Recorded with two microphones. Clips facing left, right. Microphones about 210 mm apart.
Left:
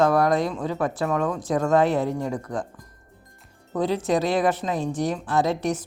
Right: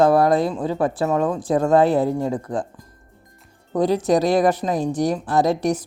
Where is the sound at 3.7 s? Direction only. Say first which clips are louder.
Right 5 dB; 40° right (ahead or behind).